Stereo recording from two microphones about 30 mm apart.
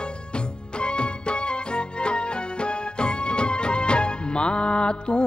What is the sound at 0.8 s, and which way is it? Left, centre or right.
Music, left.